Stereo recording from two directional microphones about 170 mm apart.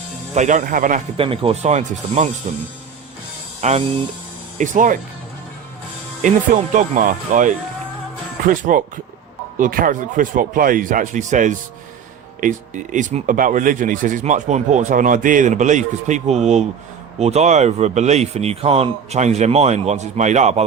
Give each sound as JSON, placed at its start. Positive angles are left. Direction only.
{"t": 0.3, "sound": "speech", "side_deg": -45}
{"t": 1.1, "sound": "speech", "side_deg": -30}
{"t": 3.6, "sound": "speech", "side_deg": -40}
{"t": 6.2, "sound": "speech", "side_deg": -50}